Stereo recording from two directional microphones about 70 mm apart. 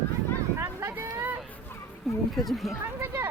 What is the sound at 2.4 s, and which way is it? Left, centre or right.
Speech, centre.